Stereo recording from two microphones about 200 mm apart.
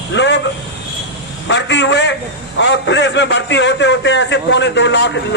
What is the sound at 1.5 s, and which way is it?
A man's voice, 60° left (ahead or behind).